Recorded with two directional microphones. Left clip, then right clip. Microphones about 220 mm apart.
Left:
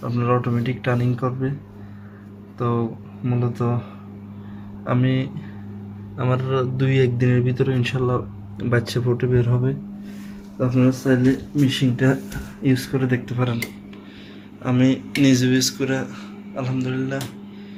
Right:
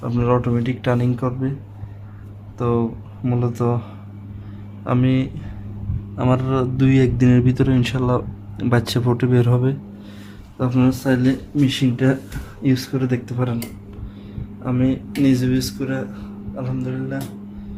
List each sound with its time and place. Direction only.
0.1 s speech: 15° right (ahead or behind)
2.6 s speech: 15° right (ahead or behind)
4.9 s speech: 20° right (ahead or behind)
14.6 s speech: centre (ahead or behind)